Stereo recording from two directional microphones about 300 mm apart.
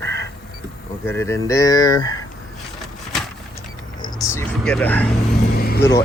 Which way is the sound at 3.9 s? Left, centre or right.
Centre.